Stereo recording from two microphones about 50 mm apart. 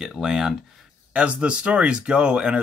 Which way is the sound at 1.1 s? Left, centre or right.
Right.